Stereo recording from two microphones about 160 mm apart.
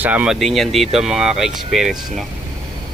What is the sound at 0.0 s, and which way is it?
Speech, 10° right (ahead or behind).